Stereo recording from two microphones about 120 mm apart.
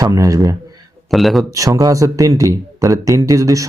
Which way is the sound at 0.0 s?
30° right (ahead or behind).